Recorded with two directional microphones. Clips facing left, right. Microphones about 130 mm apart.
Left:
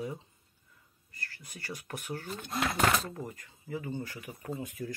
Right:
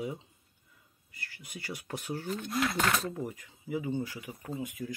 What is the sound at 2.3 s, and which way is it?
Speech, 30° left (ahead or behind).